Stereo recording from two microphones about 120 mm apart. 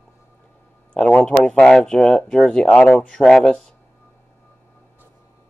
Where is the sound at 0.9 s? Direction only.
10° left (ahead or behind).